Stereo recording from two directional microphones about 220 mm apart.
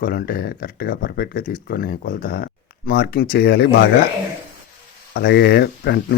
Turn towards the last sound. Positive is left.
turn(degrees=45)  # may be behind; listen again after turning